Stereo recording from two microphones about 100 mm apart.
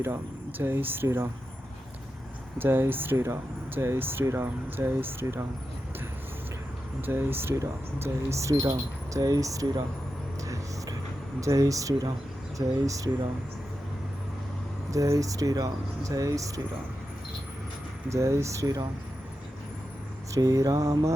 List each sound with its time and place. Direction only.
0.6 s speech: 20° right (ahead or behind)
2.6 s speech: 20° right (ahead or behind)
7.0 s speech: 20° right (ahead or behind)
10.4 s vehicle: 35° right (ahead or behind)
11.3 s speech: 35° right (ahead or behind)
14.8 s speech: 30° right (ahead or behind)
18.1 s speech: 30° right (ahead or behind)
20.3 s speech: 35° right (ahead or behind)